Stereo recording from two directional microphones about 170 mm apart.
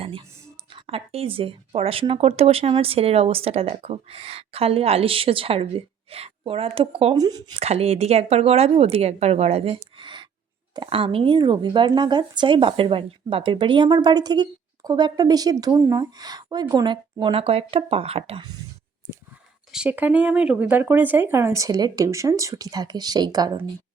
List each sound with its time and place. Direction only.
0.9 s speech: 35° right (ahead or behind)
7.2 s speech: 20° right (ahead or behind)
7.5 s speech: 40° right (ahead or behind)
19.7 s speech: 5° right (ahead or behind); by 23.5 s 25° right (ahead or behind)